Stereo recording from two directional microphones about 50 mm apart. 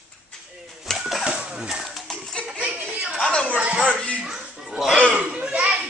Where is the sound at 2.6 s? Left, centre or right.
Right.